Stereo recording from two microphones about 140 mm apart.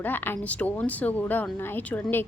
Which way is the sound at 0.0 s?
15° left (ahead or behind).